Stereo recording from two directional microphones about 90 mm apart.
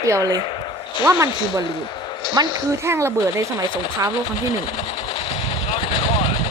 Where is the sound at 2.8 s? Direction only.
30° right (ahead or behind).